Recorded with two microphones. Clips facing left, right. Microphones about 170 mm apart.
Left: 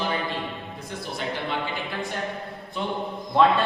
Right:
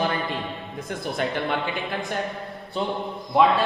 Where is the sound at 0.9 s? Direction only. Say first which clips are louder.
Right 4 dB; 55° right (ahead or behind).